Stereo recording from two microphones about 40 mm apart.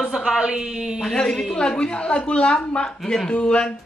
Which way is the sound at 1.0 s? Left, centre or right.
Centre.